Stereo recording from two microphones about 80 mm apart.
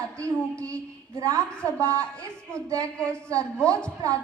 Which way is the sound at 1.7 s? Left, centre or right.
Right.